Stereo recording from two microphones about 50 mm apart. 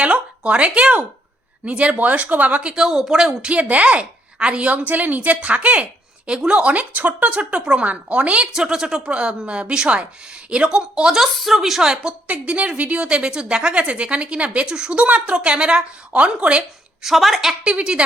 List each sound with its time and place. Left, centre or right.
0.0 s a sound: right
1.6 s a woman's voice: right
2.6 s speech: centre
3.5 s a woman's voice: right
8.5 s a woman's voice: centre
11.2 s a woman's voice: centre
12.3 s a woman's voice: right
17.0 s a woman's voice: centre
17.6 s a woman's voice: right